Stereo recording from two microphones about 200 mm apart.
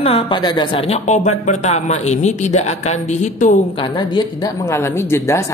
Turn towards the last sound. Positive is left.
turn(degrees=15)  # may be behind; listen again after turning